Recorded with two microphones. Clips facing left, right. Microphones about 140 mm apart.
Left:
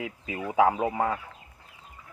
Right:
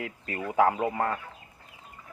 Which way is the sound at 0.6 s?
5° left (ahead or behind).